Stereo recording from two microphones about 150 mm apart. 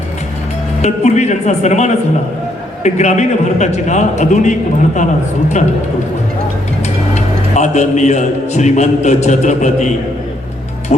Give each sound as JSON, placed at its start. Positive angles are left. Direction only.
{"t": 0.8, "sound": "a man's voice", "side_deg": 50}
{"t": 7.1, "sound": "a man's voice", "side_deg": 50}